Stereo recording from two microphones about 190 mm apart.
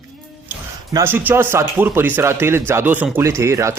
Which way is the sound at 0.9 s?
10° right (ahead or behind).